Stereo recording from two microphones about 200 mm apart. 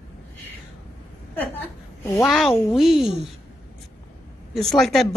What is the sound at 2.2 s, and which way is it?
Speech, centre (ahead or behind).